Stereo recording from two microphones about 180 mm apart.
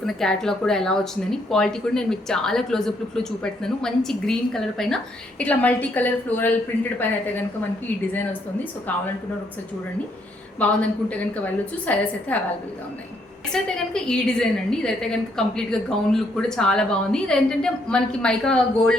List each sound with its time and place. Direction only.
0.0 s a woman's voice: 5° left (ahead or behind)
10.6 s a woman's voice: 10° left (ahead or behind)
13.5 s a woman's voice: 5° left (ahead or behind)